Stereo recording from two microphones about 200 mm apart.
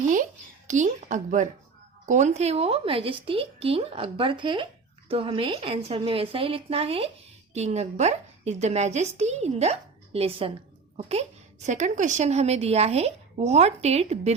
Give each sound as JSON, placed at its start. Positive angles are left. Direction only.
{"t": 0.7, "sound": "a woman's voice", "side_deg": -40}